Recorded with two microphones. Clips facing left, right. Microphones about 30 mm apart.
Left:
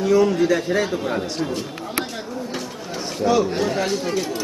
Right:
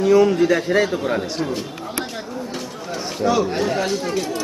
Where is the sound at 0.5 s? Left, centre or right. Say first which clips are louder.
Right 2 dB; right.